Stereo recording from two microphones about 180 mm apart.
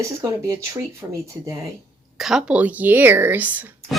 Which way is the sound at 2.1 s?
Centre (ahead or behind).